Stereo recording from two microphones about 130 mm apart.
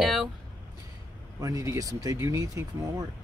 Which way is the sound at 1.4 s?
25° right (ahead or behind).